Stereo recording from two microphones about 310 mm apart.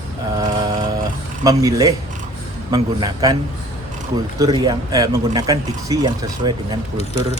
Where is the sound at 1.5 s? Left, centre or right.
Centre.